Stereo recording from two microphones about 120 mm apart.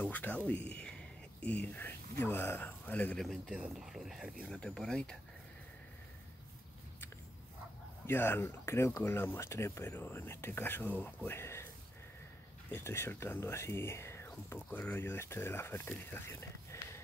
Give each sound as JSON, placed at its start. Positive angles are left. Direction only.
{"t": 0.0, "sound": "speech", "side_deg": 15}
{"t": 3.2, "sound": "speech", "side_deg": -5}
{"t": 8.1, "sound": "speech", "side_deg": 20}
{"t": 12.7, "sound": "speech", "side_deg": 20}